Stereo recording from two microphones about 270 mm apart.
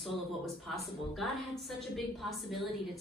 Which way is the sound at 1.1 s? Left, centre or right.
Centre.